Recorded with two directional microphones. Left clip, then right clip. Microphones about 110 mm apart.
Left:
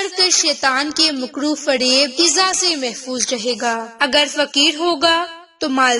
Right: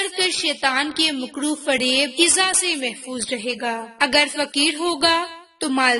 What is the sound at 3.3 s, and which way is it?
Speech, 20° left (ahead or behind).